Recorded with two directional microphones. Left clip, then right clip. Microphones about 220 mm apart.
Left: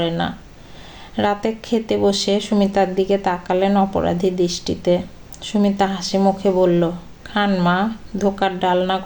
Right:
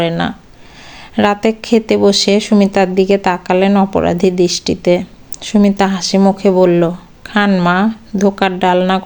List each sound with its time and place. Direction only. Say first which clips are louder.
0.0 s speech: right 5 dB; 30° right (ahead or behind)